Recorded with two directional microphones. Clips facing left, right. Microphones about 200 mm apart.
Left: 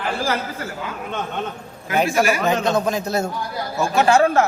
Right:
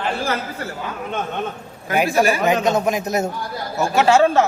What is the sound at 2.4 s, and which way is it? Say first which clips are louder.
A man's voice: right 2 dB; 15° right (ahead or behind).